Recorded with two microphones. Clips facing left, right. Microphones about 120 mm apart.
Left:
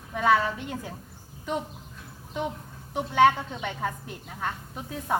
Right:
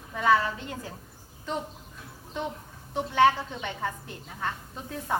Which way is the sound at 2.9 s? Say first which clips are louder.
Left 1 dB; 15° left (ahead or behind).